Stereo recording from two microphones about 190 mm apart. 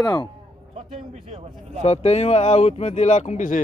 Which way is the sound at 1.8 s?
35° left (ahead or behind).